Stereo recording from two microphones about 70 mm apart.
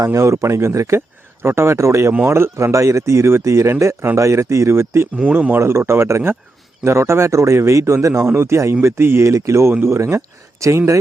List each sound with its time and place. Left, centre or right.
0.0 s speech: right
5.1 s speech: centre
5.5 s speech: right